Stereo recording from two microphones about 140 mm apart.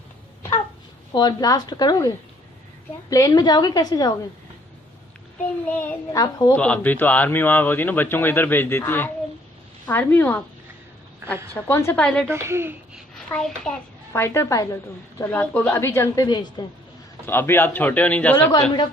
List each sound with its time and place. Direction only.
1.1 s a woman's voice: 30° left (ahead or behind)
5.6 s speech: 10° left (ahead or behind)
6.1 s a woman's voice: 25° left (ahead or behind)
6.6 s speech: 10° left (ahead or behind)
11.2 s a woman's voice: 15° right (ahead or behind)
11.5 s speech: 15° left (ahead or behind)
12.3 s speech: 20° right (ahead or behind)
13.1 s a child's voice: 5° left (ahead or behind)
14.1 s a woman's voice: 20° left (ahead or behind)
17.2 s speech: 15° left (ahead or behind)